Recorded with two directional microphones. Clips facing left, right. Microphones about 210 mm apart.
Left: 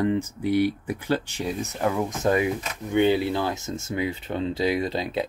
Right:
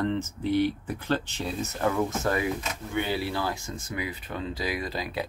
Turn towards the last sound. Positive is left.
turn(degrees=25)  # may be behind; listen again after turning